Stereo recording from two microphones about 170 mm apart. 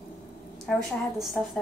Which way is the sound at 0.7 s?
5° left (ahead or behind).